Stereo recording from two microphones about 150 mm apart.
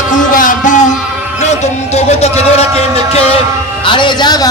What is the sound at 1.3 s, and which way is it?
Speech, 45° left (ahead or behind).